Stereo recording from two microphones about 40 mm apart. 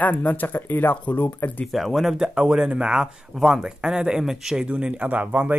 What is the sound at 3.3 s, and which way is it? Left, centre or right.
Speech, centre.